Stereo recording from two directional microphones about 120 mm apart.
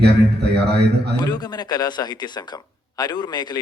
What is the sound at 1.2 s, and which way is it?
Speech, 35° left (ahead or behind).